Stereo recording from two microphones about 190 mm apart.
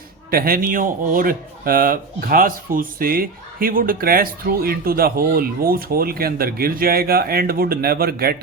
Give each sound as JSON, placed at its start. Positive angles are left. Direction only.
{"t": 0.3, "sound": "speech", "side_deg": -50}